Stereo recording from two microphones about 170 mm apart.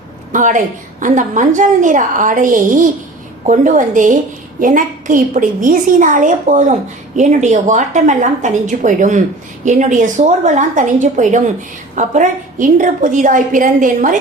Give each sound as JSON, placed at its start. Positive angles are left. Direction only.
{"t": 0.3, "sound": "a woman's voice", "side_deg": -50}